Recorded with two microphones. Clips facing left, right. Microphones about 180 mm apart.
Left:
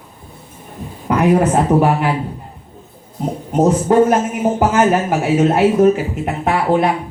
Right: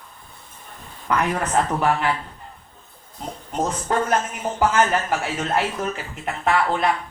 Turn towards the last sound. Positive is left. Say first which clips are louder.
# left 6 dB
turn(degrees=10)  # may be behind; listen again after turning